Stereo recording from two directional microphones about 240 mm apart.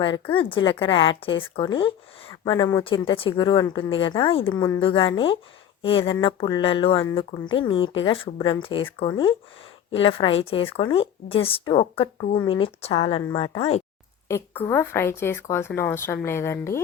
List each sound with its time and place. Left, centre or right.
0.3 s speech: left
14.3 s speech: centre